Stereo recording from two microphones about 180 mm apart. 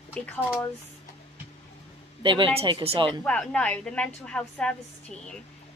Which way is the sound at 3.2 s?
5° left (ahead or behind).